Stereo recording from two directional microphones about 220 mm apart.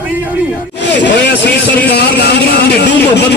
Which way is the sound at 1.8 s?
45° left (ahead or behind).